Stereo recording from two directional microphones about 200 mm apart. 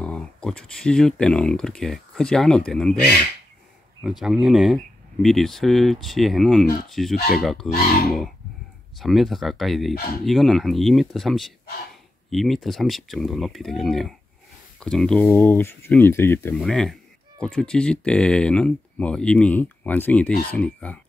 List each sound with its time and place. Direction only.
0.0 s speech: 5° left (ahead or behind)
7.7 s speech: 50° left (ahead or behind)
9.0 s speech: centre (ahead or behind)